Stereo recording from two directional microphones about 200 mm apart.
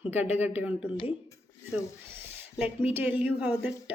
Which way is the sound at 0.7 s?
25° left (ahead or behind).